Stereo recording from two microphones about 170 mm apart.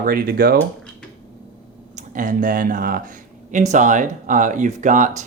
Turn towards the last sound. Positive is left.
turn(degrees=-50)  # may be behind; listen again after turning